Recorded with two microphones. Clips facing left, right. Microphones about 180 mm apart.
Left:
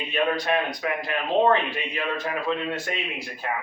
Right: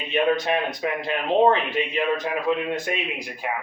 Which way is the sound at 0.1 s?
20° right (ahead or behind).